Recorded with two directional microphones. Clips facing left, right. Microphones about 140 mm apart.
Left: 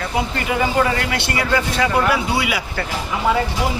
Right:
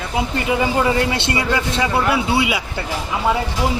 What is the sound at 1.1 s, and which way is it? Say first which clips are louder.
A man's voice: even; 25° right (ahead or behind).